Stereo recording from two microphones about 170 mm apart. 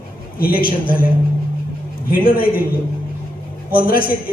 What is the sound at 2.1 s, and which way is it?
Speech, 60° left (ahead or behind).